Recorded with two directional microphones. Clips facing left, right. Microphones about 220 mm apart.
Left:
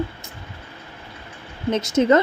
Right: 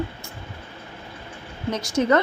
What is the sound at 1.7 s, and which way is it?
Speech, 25° left (ahead or behind).